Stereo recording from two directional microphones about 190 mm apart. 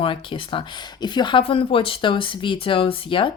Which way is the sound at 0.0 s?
25° left (ahead or behind).